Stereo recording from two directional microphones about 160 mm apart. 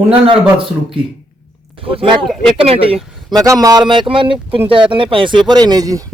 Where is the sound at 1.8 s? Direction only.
35° right (ahead or behind).